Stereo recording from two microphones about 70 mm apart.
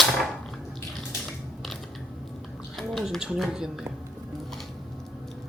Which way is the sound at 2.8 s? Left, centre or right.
Centre.